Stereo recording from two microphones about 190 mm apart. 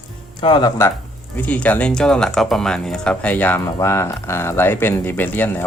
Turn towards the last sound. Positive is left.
turn(degrees=10)  # may be behind; listen again after turning